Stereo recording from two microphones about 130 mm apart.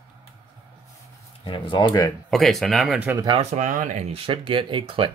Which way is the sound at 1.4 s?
40° left (ahead or behind).